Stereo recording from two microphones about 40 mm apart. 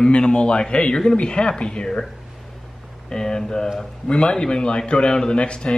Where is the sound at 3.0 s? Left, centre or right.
Centre.